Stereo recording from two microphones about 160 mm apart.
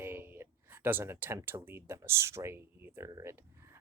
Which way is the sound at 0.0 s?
15° right (ahead or behind).